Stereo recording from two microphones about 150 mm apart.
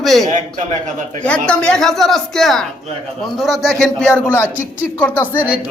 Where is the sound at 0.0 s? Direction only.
Centre (ahead or behind).